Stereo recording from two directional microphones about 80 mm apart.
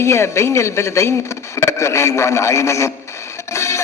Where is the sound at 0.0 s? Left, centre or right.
Left.